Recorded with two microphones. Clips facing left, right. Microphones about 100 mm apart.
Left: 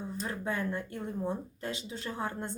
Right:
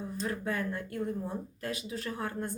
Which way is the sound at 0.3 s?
20° left (ahead or behind).